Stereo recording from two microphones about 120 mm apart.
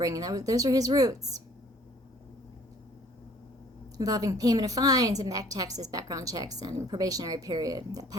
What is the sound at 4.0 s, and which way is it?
A woman's voice, 30° right (ahead or behind).